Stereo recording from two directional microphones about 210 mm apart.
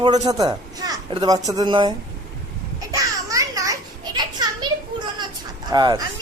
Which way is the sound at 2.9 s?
15° right (ahead or behind).